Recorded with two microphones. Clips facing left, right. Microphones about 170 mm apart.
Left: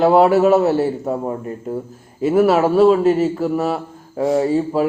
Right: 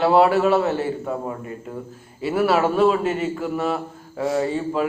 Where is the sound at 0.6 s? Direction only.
35° left (ahead or behind).